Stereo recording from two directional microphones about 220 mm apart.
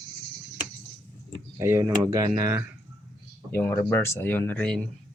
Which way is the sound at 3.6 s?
10° left (ahead or behind).